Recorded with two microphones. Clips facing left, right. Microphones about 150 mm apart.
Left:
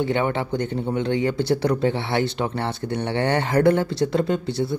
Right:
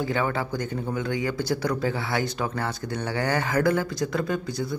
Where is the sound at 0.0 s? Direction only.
25° left (ahead or behind).